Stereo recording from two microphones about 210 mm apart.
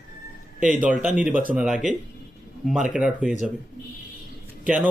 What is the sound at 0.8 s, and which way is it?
Speech, 5° right (ahead or behind).